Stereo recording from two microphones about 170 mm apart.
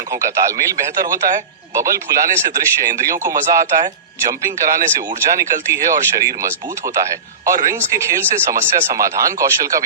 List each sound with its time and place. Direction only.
0.1 s speech: 20° right (ahead or behind)